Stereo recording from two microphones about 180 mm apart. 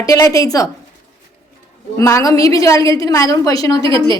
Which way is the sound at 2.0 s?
15° left (ahead or behind).